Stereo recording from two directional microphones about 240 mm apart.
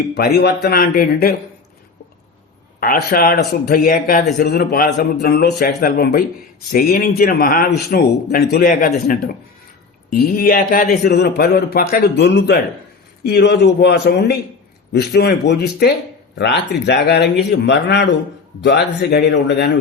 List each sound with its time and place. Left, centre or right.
0.1 s speech: left
2.8 s speech: left